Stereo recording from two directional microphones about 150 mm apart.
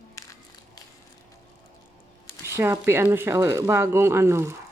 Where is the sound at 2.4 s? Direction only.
15° right (ahead or behind).